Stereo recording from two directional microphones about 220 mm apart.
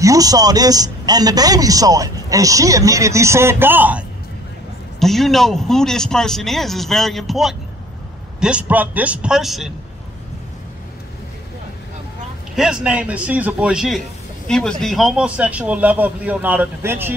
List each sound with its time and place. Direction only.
0.0 s speech: 15° right (ahead or behind)
5.0 s speech: centre (ahead or behind)
12.5 s speech: 5° right (ahead or behind)